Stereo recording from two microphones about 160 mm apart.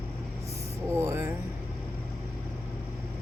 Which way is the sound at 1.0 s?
15° right (ahead or behind).